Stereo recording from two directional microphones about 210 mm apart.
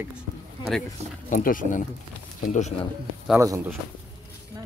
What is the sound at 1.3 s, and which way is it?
Speech, 40° left (ahead or behind).